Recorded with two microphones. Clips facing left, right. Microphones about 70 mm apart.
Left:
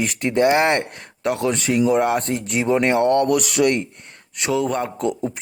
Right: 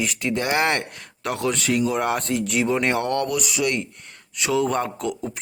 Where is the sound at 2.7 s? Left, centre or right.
Centre.